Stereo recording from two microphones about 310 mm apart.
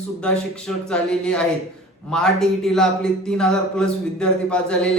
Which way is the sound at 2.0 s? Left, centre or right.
Centre.